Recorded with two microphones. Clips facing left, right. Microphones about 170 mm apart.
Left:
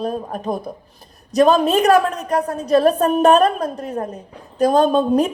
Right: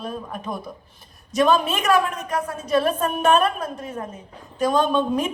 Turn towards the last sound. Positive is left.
turn(degrees=35)  # may be behind; listen again after turning